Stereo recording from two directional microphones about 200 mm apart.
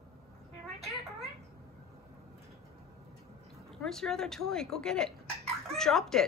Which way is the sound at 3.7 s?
Centre (ahead or behind).